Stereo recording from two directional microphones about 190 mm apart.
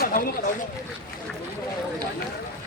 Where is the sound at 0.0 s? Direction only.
50° left (ahead or behind).